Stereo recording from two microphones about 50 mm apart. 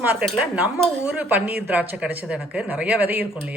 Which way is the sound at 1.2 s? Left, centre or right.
Right.